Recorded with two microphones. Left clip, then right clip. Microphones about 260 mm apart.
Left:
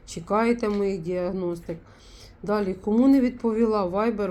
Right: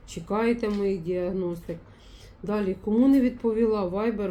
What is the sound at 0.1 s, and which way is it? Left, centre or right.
Speech, left.